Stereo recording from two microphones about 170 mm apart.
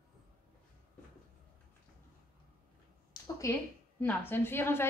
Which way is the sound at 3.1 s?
20° left (ahead or behind).